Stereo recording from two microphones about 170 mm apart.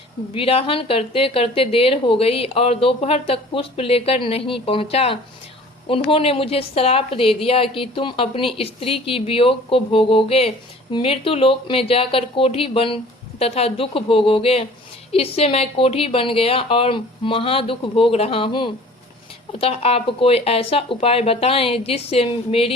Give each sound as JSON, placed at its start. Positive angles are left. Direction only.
{"t": 0.3, "sound": "a woman's voice", "side_deg": 35}